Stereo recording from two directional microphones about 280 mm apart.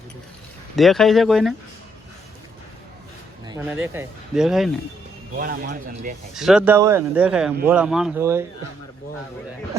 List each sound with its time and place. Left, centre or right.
0.8 s speech: centre
3.4 s speech: centre
5.4 s speech: right
6.3 s speech: centre